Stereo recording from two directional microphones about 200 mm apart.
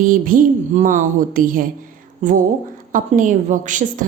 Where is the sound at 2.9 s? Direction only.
40° right (ahead or behind).